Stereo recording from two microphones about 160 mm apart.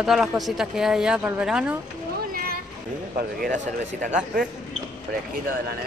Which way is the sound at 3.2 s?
65° right (ahead or behind).